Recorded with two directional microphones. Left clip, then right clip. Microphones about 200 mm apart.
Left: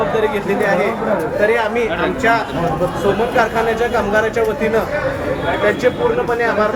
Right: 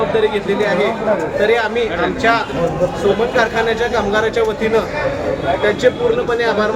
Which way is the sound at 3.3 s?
5° right (ahead or behind).